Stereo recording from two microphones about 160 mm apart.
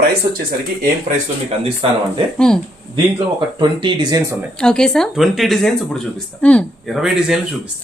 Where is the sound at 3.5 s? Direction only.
30° right (ahead or behind).